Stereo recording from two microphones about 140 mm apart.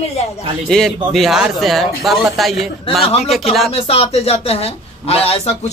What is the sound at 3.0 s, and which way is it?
Speech, 45° left (ahead or behind).